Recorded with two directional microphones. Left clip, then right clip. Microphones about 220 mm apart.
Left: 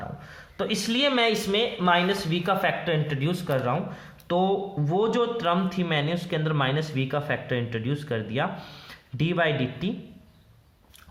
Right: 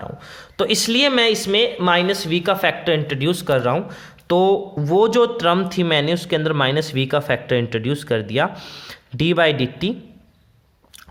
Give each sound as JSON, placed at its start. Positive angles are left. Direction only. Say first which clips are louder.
{"t": 0.2, "sound": "speech", "louder": "right 11 dB", "side_deg": -45}